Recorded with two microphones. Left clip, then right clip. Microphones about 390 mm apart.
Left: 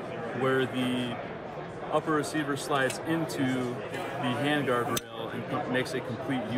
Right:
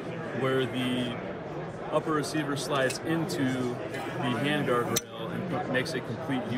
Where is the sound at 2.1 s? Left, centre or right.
Centre.